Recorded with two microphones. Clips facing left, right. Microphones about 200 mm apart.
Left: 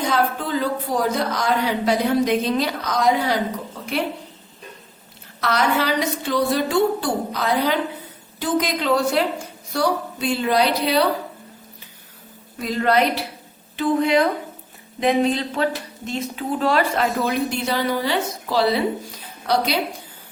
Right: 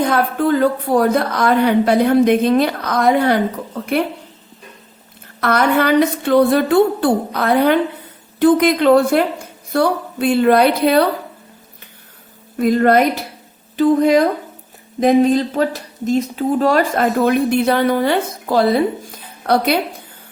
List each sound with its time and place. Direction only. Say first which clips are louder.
0.0 s a woman's voice: right 6 dB; 55° right (ahead or behind)
5.4 s a woman's voice: right 5 dB; 55° right (ahead or behind)
12.5 s speech: right 7 dB; 55° right (ahead or behind)